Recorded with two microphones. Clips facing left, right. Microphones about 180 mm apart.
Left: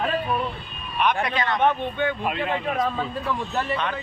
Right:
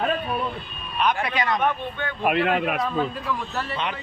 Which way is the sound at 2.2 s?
65° right (ahead or behind).